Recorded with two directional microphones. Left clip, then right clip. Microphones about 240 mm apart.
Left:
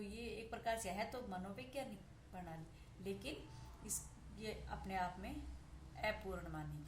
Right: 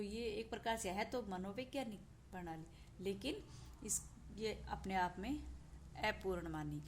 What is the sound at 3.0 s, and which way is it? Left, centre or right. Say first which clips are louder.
Speech: right 4 dB; right.